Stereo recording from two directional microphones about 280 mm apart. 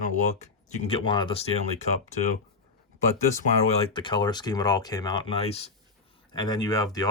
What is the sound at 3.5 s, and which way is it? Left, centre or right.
Speech, centre.